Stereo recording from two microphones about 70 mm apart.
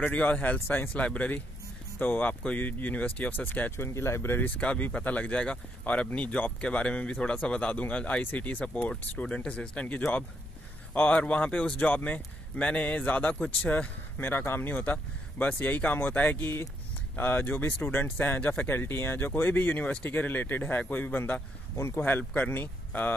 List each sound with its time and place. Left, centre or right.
0.0 s a man's voice: left
3.7 s speech: left
4.4 s a man's voice: left
21.7 s a man's voice: left